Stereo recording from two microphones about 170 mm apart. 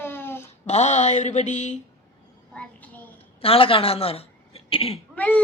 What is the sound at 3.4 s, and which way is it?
Speech, 35° left (ahead or behind).